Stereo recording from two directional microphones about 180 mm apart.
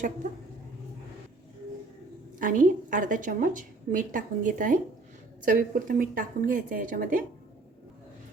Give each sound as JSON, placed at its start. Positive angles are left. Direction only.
{"t": 2.4, "sound": "a woman's voice", "side_deg": -45}